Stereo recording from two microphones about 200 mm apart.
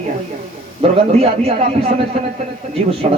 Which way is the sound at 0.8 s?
30° right (ahead or behind).